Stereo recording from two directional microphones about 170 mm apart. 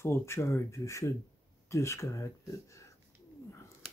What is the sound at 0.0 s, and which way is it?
Speech, 15° left (ahead or behind).